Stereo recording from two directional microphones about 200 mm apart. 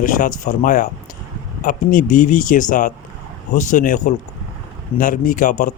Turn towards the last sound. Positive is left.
turn(degrees=40)  # may be behind; listen again after turning